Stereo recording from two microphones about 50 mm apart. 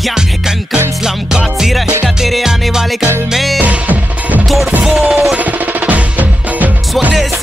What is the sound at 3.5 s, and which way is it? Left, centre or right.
Music, right.